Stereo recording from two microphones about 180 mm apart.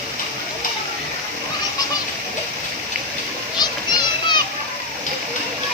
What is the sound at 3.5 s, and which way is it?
Children playing, 25° left (ahead or behind).